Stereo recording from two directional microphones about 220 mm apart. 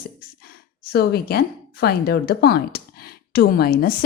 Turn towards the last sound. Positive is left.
turn(degrees=40)  # may be behind; listen again after turning